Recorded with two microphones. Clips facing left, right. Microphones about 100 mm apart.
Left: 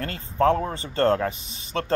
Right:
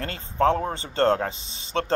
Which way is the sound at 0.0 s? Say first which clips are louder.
Left 1 dB; 30° right (ahead or behind).